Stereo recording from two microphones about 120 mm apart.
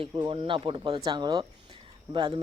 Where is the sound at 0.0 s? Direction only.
45° right (ahead or behind).